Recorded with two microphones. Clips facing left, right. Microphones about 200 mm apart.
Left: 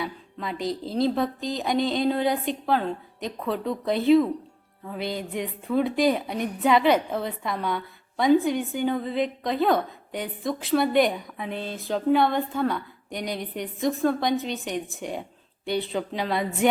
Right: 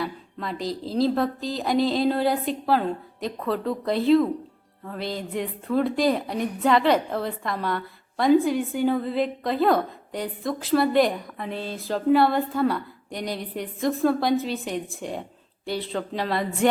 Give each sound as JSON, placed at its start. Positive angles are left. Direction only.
{"t": 0.0, "sound": "speech", "side_deg": 0}